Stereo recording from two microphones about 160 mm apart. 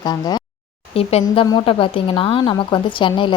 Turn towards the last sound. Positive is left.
turn(degrees=30)  # may be behind; listen again after turning